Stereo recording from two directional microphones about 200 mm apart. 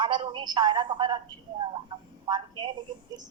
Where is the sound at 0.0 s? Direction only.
25° right (ahead or behind).